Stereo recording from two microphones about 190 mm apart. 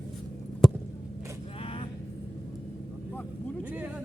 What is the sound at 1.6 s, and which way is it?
Vehicle, 30° left (ahead or behind).